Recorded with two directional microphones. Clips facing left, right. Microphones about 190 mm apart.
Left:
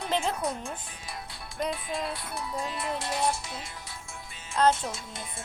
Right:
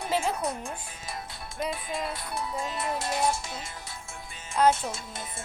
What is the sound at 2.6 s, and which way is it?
Music, 45° right (ahead or behind).